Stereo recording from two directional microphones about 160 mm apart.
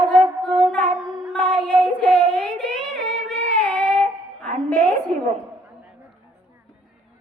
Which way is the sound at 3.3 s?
10° left (ahead or behind).